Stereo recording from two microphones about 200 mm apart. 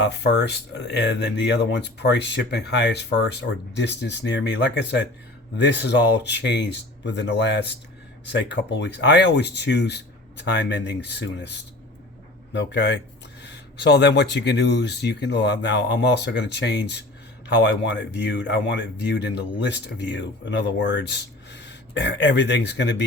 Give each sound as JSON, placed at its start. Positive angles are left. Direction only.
{"t": 0.0, "sound": "speech", "side_deg": 60}
{"t": 12.5, "sound": "speech", "side_deg": 60}